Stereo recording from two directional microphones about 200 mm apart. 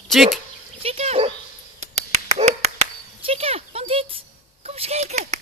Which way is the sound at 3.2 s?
30° right (ahead or behind).